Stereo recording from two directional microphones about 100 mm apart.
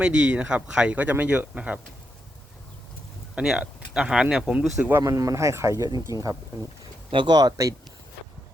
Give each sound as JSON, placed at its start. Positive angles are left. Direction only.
{"t": 0.0, "sound": "speech", "side_deg": -10}
{"t": 3.3, "sound": "speech", "side_deg": -10}
{"t": 4.9, "sound": "speech", "side_deg": -30}
{"t": 7.1, "sound": "speech", "side_deg": -55}
{"t": 7.3, "sound": "speech", "side_deg": -40}